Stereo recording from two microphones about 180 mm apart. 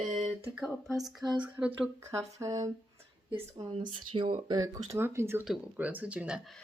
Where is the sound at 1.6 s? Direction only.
15° right (ahead or behind).